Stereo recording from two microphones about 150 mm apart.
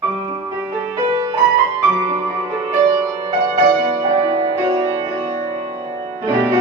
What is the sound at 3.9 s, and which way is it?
Music, 35° right (ahead or behind).